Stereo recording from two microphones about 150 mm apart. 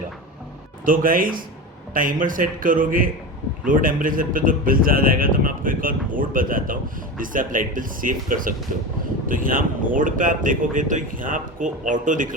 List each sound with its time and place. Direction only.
0.9 s a man's voice: 70° right (ahead or behind)